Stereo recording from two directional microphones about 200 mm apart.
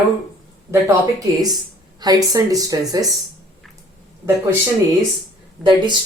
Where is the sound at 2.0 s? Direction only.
20° right (ahead or behind).